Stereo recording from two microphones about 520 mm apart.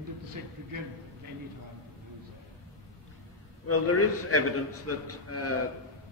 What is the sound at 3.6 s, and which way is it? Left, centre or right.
A man's voice, left.